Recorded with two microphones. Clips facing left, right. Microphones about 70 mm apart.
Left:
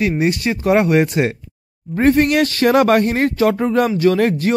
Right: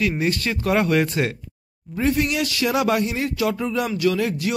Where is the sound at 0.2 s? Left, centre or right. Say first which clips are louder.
Left 5 dB; left.